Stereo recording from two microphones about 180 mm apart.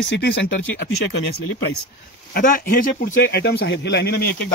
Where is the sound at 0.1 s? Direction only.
75° left (ahead or behind).